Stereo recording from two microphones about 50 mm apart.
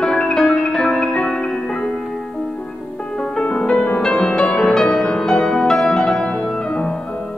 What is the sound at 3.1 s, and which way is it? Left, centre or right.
Music, centre.